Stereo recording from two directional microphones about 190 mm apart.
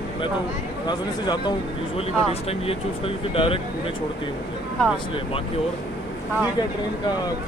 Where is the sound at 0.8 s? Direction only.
25° left (ahead or behind).